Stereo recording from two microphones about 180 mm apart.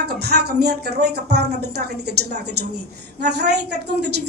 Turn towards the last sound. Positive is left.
turn(degrees=-70)  # may be behind; listen again after turning